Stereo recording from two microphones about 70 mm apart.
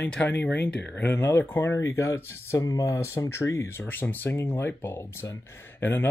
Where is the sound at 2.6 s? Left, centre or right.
Left.